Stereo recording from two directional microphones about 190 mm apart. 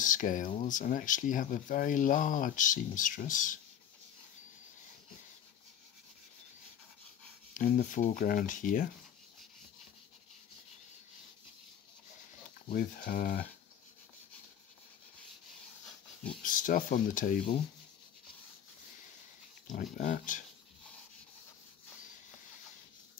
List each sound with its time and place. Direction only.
0.0 s speech: 45° left (ahead or behind)
7.5 s speech: 45° left (ahead or behind)
12.7 s speech: 45° left (ahead or behind)
16.4 s speech: 45° left (ahead or behind)
19.7 s speech: 45° left (ahead or behind)